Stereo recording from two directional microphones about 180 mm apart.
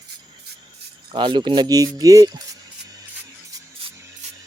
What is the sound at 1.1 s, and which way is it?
Speech, 25° right (ahead or behind).